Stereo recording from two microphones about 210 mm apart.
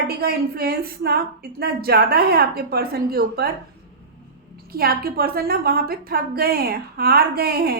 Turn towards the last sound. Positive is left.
turn(degrees=-45)  # may be behind; listen again after turning